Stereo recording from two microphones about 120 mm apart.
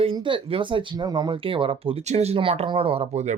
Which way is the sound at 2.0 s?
60° right (ahead or behind).